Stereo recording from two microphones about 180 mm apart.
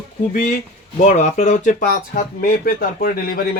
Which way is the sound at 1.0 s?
40° left (ahead or behind).